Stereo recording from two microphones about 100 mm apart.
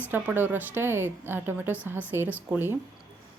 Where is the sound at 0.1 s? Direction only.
20° right (ahead or behind).